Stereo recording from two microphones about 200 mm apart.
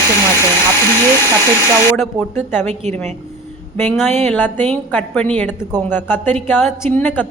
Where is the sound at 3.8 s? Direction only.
10° left (ahead or behind).